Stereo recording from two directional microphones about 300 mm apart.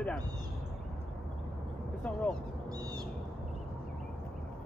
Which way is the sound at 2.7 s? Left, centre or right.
Centre.